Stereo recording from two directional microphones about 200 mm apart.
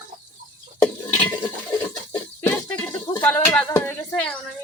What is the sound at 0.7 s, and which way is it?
Stir, 15° left (ahead or behind).